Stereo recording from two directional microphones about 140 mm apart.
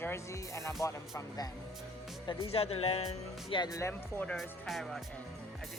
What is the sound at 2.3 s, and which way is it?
Speech, 45° left (ahead or behind).